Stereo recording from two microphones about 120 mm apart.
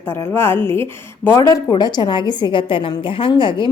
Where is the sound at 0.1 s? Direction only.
20° left (ahead or behind).